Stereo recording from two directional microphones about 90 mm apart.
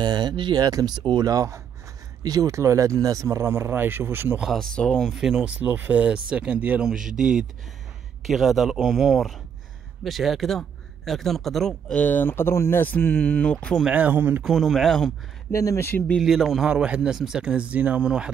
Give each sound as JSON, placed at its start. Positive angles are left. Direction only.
{"t": 0.0, "sound": "speech", "side_deg": -55}
{"t": 4.4, "sound": "speech", "side_deg": 0}
{"t": 5.1, "sound": "speech", "side_deg": -5}
{"t": 11.9, "sound": "speech", "side_deg": 15}
{"t": 13.8, "sound": "speech", "side_deg": -20}
{"t": 14.4, "sound": "speech", "side_deg": 0}
{"t": 15.5, "sound": "speech", "side_deg": 35}
{"t": 16.2, "sound": "speech", "side_deg": 0}